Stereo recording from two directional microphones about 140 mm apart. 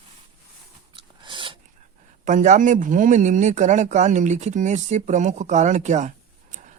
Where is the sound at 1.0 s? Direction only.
35° right (ahead or behind).